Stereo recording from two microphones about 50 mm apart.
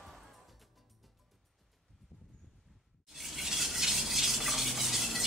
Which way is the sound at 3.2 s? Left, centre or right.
Centre.